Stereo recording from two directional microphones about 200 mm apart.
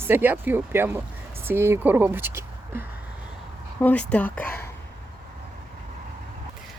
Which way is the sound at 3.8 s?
5° left (ahead or behind).